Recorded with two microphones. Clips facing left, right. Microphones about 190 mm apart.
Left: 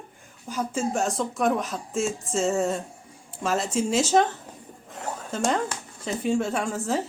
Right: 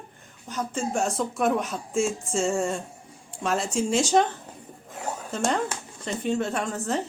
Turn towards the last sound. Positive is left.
turn(degrees=5)  # may be behind; listen again after turning